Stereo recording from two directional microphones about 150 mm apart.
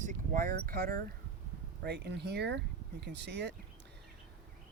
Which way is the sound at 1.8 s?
90° right.